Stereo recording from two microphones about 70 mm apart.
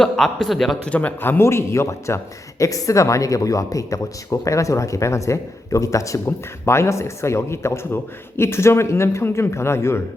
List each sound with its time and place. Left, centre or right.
0.0 s a man's voice: centre
0.9 s a man's voice: centre
1.2 s a man's voice: left